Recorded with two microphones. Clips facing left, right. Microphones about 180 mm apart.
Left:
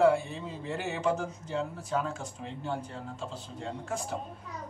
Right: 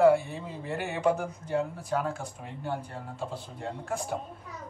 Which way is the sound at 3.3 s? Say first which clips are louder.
Right 2 dB; 55° right (ahead or behind).